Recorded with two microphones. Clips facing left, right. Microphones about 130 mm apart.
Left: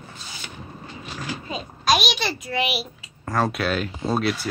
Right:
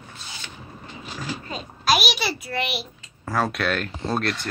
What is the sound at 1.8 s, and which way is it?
A child's voice, 5° right (ahead or behind).